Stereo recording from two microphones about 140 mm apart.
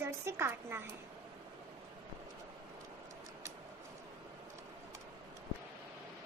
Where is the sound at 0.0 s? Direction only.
20° right (ahead or behind).